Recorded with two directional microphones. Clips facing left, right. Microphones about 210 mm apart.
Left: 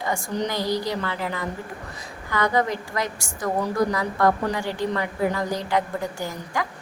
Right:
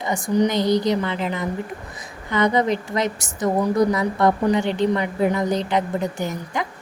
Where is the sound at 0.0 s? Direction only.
20° right (ahead or behind).